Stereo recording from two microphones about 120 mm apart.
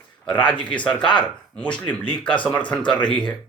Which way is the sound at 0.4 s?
10° left (ahead or behind).